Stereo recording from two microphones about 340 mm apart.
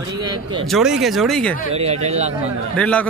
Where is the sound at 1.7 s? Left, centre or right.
Centre.